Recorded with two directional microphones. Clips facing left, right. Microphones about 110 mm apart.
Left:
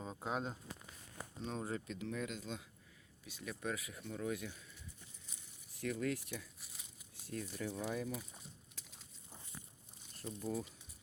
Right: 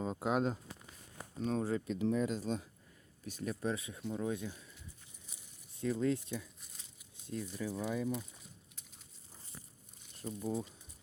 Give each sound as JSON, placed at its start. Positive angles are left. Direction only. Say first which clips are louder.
{"t": 0.2, "sound": "speech", "louder": "right 7 dB", "side_deg": -70}
{"t": 1.4, "sound": "speech", "louder": "right 8 dB", "side_deg": -50}
{"t": 1.6, "sound": "speech", "louder": "right 8 dB", "side_deg": -35}
{"t": 3.5, "sound": "speech", "louder": "right 4 dB", "side_deg": -30}
{"t": 5.7, "sound": "speech", "louder": "right 5 dB", "side_deg": -25}
{"t": 10.4, "sound": "speech", "louder": "right 3 dB", "side_deg": -20}